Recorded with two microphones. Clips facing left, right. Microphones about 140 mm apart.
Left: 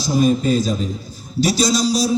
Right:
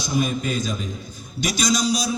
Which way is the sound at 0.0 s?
35° left (ahead or behind).